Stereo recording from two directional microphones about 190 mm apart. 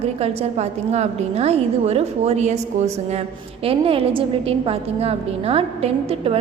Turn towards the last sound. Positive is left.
turn(degrees=-30)  # may be behind; listen again after turning